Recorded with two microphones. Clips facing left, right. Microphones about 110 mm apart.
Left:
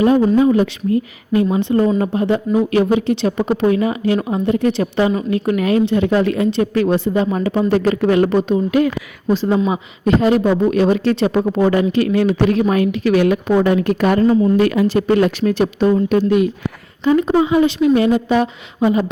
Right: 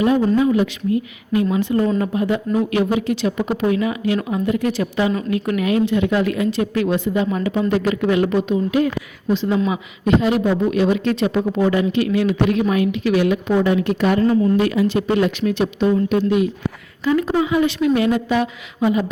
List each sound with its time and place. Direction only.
0.3 s speech: 35° left (ahead or behind)
17.0 s a woman's voice: 25° left (ahead or behind)